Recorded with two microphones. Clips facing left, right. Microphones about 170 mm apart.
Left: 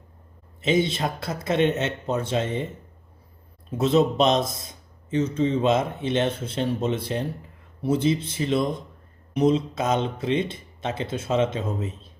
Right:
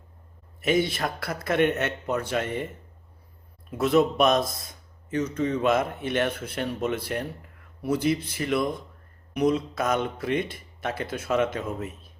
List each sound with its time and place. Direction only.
0.6 s a man's voice: 20° left (ahead or behind)
3.7 s a man's voice: 25° left (ahead or behind)